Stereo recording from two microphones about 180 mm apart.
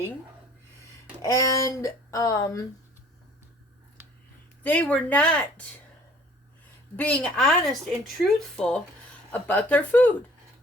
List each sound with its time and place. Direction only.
1.2 s speech: 15° left (ahead or behind)
4.6 s speech: 10° left (ahead or behind)
6.9 s a woman's voice: 10° left (ahead or behind)